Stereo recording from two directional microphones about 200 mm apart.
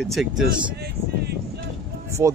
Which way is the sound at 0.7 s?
55° right (ahead or behind).